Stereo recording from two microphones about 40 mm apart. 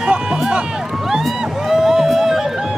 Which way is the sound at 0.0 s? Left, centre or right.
Right.